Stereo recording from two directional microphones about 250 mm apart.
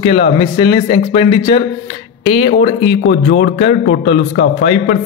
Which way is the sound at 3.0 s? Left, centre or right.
Left.